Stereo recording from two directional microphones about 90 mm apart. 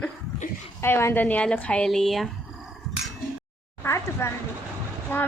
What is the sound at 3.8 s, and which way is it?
Speech, 30° left (ahead or behind).